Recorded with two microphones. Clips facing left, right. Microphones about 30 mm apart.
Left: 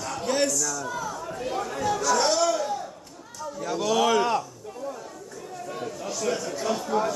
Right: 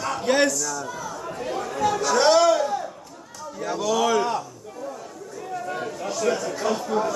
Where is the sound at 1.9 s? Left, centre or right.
Right.